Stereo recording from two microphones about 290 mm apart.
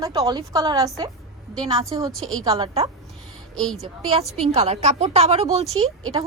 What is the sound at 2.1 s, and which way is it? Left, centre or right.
Speech, centre.